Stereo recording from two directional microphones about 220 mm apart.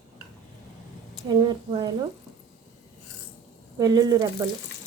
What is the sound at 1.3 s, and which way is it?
Speech, 20° right (ahead or behind).